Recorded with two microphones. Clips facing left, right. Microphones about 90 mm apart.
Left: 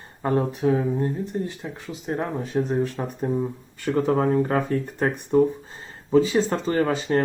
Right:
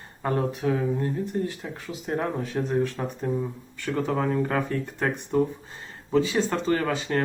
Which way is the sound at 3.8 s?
35° left (ahead or behind).